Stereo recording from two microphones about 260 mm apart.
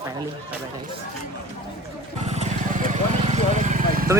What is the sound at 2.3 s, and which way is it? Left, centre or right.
Vehicle, right.